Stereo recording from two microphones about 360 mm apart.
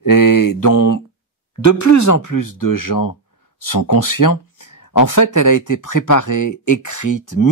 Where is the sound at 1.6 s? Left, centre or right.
Left.